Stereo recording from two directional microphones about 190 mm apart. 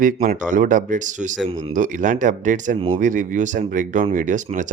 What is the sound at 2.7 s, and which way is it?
Speech, 30° right (ahead or behind).